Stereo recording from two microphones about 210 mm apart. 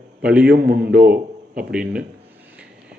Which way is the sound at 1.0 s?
45° right (ahead or behind).